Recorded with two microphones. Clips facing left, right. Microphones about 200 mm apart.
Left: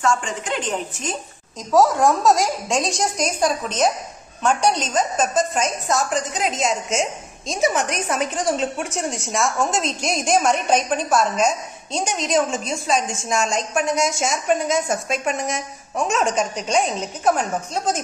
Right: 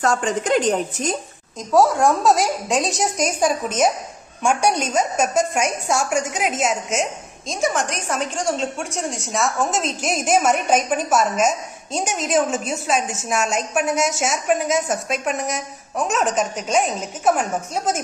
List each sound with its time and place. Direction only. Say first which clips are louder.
0.0 s speech: right 2 dB; 40° right (ahead or behind)
1.7 s a woman's voice: even; centre (ahead or behind)